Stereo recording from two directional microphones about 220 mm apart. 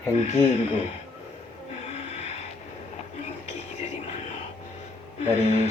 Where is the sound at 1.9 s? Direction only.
30° left (ahead or behind).